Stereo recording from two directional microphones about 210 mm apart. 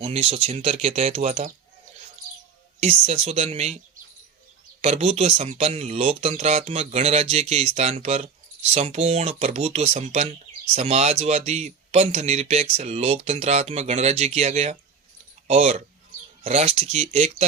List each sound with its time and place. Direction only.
0.0 s speech: 30° right (ahead or behind)
2.8 s speech: 30° right (ahead or behind)
4.8 s speech: 30° right (ahead or behind)